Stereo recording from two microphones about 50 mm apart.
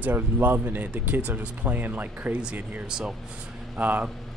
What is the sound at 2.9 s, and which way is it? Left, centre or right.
A man's voice, centre.